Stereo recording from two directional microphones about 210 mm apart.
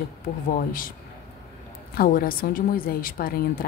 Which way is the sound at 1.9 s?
45° left (ahead or behind).